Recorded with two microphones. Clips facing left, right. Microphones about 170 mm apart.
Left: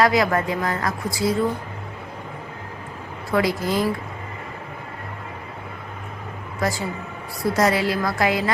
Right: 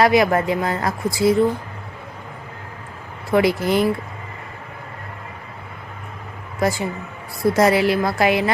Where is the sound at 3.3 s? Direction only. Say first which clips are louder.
Right 4 dB; 25° right (ahead or behind).